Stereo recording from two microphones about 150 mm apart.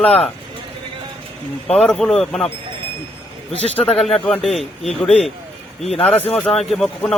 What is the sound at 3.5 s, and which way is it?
Speech, 45° right (ahead or behind).